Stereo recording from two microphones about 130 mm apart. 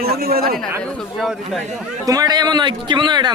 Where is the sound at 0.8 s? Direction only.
5° left (ahead or behind).